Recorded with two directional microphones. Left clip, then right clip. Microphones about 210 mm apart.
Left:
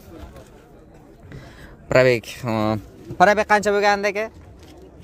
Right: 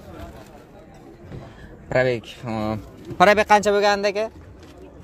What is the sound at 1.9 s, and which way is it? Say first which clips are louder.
Speech: left 5 dB; 30° left (ahead or behind).